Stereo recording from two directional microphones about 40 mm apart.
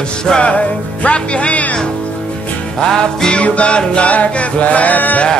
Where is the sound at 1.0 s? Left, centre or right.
Left.